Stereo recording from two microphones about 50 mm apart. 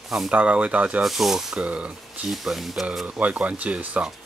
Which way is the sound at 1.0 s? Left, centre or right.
Centre.